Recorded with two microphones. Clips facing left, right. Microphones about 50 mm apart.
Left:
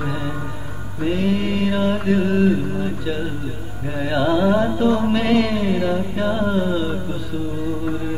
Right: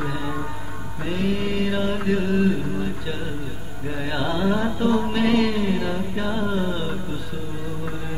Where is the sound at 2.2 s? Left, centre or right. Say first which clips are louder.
Left 3 dB; centre.